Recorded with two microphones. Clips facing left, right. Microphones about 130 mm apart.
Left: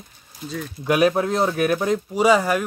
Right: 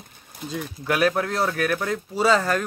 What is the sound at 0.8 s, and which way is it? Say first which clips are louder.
Speech: left 4 dB; 20° left (ahead or behind).